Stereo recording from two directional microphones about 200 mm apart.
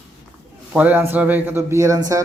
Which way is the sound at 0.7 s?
10° right (ahead or behind).